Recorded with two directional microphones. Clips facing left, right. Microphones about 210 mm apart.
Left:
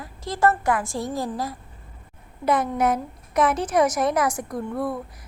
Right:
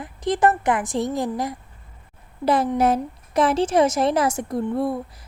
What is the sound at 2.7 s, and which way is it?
A woman's voice, 30° right (ahead or behind).